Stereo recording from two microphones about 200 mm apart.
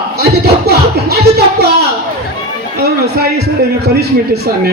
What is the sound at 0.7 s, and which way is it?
Music, 55° right (ahead or behind).